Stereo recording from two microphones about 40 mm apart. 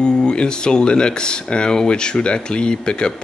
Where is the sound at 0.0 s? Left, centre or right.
Left.